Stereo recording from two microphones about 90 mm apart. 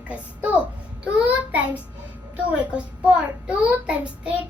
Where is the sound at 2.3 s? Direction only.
15° right (ahead or behind).